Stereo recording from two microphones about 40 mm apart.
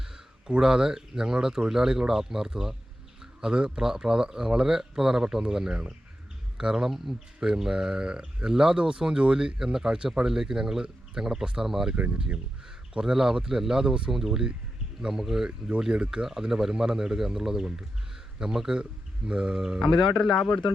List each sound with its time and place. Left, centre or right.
0.4 s speech: centre
6.8 s speech: centre
7.3 s speech: centre
19.3 s speech: right
19.8 s speech: centre